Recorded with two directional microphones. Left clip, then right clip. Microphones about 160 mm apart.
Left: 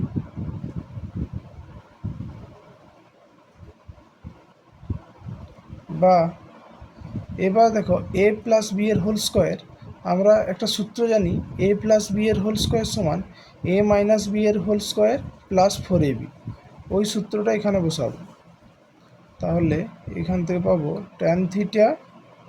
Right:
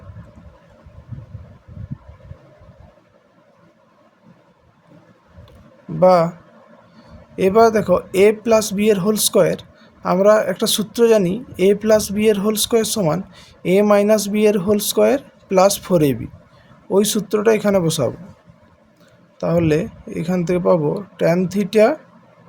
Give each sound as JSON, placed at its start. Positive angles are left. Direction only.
{"t": 6.0, "sound": "speech", "side_deg": -60}
{"t": 7.3, "sound": "speech", "side_deg": -60}
{"t": 19.4, "sound": "speech", "side_deg": -60}